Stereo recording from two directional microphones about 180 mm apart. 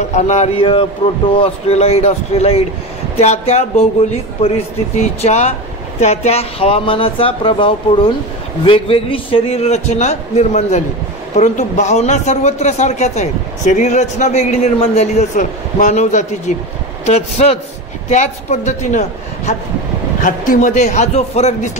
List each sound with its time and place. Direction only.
0.1 s a man's voice: 40° left (ahead or behind)